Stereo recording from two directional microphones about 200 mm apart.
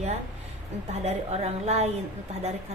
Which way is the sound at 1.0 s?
30° right (ahead or behind).